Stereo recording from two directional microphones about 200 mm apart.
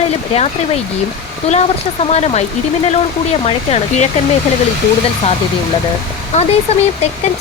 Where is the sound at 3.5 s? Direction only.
30° left (ahead or behind).